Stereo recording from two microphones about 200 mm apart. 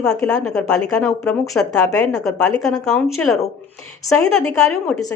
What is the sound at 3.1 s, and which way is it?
Speech, centre (ahead or behind).